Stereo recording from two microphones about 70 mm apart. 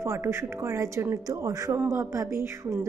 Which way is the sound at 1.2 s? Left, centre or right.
Right.